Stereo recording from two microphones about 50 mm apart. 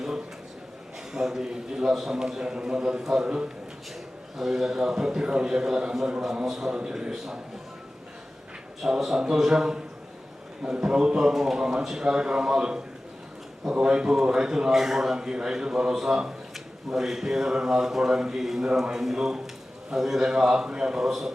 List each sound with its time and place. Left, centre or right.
1.1 s a man's voice: centre
4.4 s a man's voice: centre
6.4 s a man's voice: centre
6.7 s a man's voice: centre
8.8 s a man's voice: centre